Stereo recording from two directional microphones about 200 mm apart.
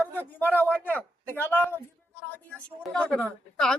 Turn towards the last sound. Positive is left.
turn(degrees=0)  # may be behind; listen again after turning